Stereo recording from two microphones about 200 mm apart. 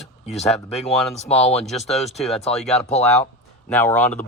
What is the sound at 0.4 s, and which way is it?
Speech, centre (ahead or behind).